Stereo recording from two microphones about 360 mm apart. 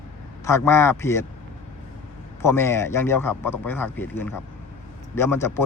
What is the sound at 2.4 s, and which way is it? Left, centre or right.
A man's voice, centre.